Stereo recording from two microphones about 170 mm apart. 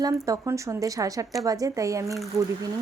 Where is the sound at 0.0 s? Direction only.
20° right (ahead or behind).